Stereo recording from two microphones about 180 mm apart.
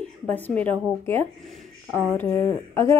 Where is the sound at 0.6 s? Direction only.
10° left (ahead or behind).